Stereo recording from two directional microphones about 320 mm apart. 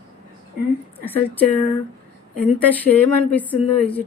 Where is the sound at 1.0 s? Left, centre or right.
Centre.